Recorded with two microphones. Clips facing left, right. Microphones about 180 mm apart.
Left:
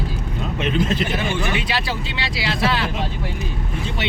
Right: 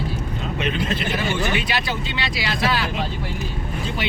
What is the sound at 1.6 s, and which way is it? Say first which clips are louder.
Speech: even; 30° left (ahead or behind).